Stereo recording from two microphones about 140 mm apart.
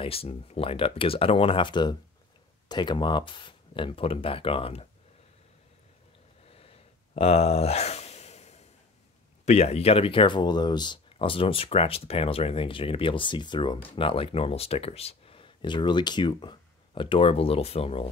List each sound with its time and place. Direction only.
0.0 s speech: 45° left (ahead or behind)
6.5 s a sound: 45° left (ahead or behind)
9.5 s speech: 50° left (ahead or behind)